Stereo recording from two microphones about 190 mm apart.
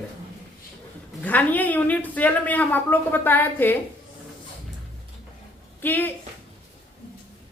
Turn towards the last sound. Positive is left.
turn(degrees=10)  # may be behind; listen again after turning